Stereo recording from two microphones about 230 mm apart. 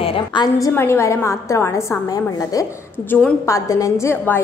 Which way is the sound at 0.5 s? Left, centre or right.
Centre.